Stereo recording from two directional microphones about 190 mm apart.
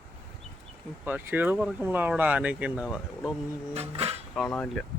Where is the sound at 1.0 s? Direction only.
10° right (ahead or behind).